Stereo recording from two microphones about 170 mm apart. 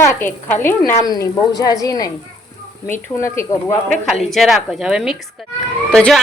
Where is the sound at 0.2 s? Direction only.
10° left (ahead or behind).